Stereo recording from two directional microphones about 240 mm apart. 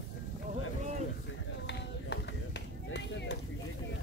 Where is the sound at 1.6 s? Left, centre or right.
Left.